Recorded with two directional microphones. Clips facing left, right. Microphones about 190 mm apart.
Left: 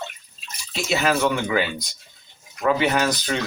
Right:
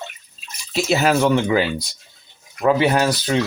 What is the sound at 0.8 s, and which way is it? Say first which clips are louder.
Speech: right 4 dB; 40° right (ahead or behind).